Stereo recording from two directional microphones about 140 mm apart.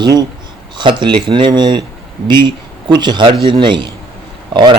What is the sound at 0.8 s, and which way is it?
Speech, 35° right (ahead or behind).